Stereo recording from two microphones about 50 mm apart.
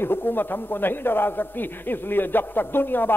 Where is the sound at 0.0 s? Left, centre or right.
Left.